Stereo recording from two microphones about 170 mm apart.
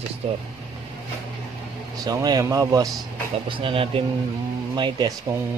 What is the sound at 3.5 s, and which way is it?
Speech, 30° right (ahead or behind).